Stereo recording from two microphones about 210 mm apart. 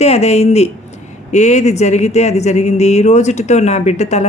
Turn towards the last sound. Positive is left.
turn(degrees=30)  # may be behind; listen again after turning